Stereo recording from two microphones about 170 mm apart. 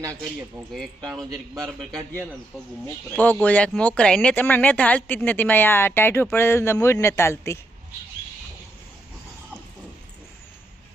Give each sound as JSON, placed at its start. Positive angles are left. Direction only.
{"t": 1.0, "sound": "a man's voice", "side_deg": -25}
{"t": 3.2, "sound": "speech", "side_deg": 10}